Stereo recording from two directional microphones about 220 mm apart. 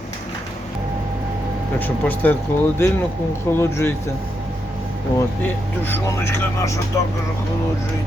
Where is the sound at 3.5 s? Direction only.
10° left (ahead or behind).